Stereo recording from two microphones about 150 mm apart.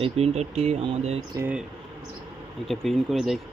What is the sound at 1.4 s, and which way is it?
Speech, 10° right (ahead or behind).